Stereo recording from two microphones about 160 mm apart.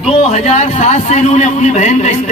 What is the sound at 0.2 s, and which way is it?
A man's voice, 40° left (ahead or behind).